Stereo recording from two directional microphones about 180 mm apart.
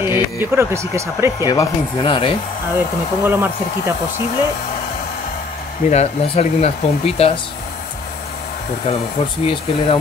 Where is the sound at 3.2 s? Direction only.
10° right (ahead or behind).